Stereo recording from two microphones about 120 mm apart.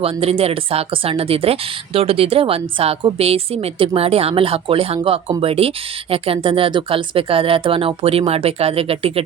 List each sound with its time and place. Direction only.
0.0 s a woman's voice: 55° right (ahead or behind)